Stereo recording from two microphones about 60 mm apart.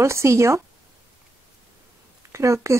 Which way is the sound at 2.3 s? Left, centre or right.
Right.